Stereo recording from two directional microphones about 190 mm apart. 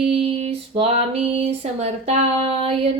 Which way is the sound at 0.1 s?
30° right (ahead or behind).